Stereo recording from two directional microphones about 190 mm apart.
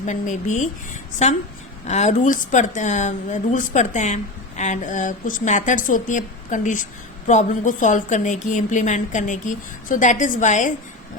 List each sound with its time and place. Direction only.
0.0 s speech: 40° left (ahead or behind)